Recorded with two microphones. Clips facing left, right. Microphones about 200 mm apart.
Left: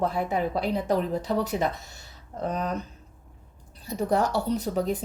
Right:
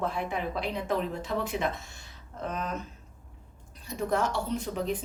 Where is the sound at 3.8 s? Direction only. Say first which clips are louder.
Left 4 dB; 35° left (ahead or behind).